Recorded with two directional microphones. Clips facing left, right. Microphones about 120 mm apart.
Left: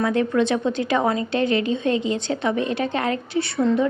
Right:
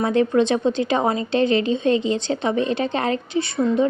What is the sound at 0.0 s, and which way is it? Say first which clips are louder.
A woman's voice: right 2 dB; 25° right (ahead or behind).